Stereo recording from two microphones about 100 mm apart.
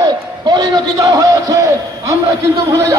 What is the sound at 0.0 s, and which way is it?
A man's voice, 40° right (ahead or behind).